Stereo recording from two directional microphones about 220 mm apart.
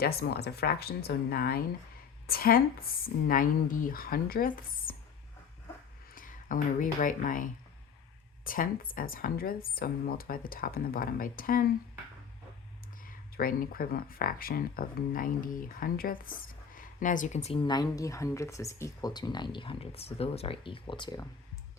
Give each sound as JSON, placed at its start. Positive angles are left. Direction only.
{"t": 0.0, "sound": "speech", "side_deg": 45}
{"t": 6.1, "sound": "speech", "side_deg": 40}
{"t": 13.1, "sound": "speech", "side_deg": 40}